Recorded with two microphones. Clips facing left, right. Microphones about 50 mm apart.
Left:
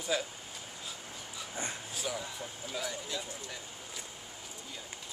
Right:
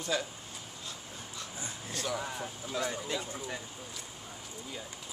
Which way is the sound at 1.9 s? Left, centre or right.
Centre.